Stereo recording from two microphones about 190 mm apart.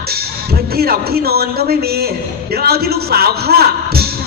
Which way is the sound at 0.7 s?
55° right (ahead or behind).